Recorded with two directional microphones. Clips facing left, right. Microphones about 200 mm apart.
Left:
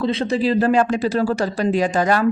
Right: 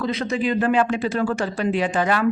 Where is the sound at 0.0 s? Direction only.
30° left (ahead or behind).